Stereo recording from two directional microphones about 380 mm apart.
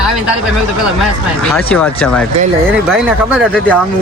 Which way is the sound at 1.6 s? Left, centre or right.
Centre.